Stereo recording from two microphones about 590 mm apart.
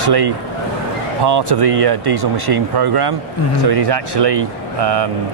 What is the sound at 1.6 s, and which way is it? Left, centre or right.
Speech, right.